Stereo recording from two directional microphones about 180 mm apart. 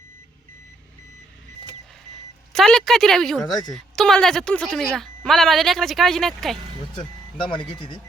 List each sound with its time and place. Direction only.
2.5 s a woman's voice: centre (ahead or behind)
3.5 s speech: 20° left (ahead or behind)
3.8 s speech: 5° left (ahead or behind)
7.5 s speech: 30° left (ahead or behind)